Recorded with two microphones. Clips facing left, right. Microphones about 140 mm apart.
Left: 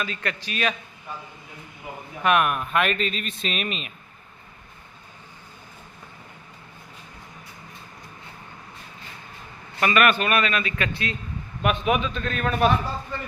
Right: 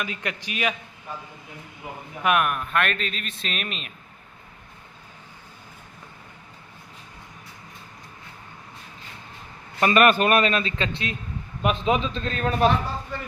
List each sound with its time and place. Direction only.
0.0 s a man's voice: 15° right (ahead or behind)
2.2 s speech: centre (ahead or behind)
9.8 s a man's voice: 35° right (ahead or behind)